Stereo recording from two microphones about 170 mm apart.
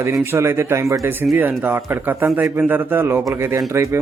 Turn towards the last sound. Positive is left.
turn(degrees=-15)  # may be behind; listen again after turning